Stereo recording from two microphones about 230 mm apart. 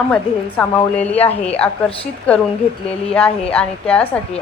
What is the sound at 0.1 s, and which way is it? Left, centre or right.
A woman's voice, centre.